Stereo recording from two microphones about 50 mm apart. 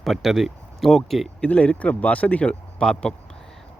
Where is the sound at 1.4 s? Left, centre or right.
Left.